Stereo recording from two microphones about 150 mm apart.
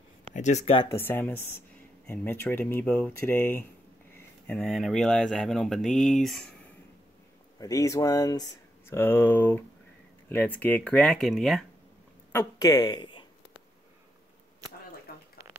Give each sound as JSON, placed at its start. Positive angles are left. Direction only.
{"t": 0.3, "sound": "speech", "side_deg": 50}
{"t": 0.8, "sound": "speech", "side_deg": 15}
{"t": 4.5, "sound": "speech", "side_deg": 0}
{"t": 7.5, "sound": "speech", "side_deg": 20}
{"t": 12.3, "sound": "a woman's voice", "side_deg": 20}
{"t": 15.1, "sound": "a sound", "side_deg": 90}